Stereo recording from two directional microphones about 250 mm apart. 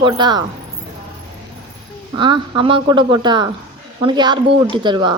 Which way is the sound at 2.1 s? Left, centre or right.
Centre.